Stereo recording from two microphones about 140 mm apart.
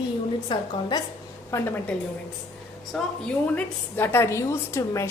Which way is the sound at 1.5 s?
15° left (ahead or behind).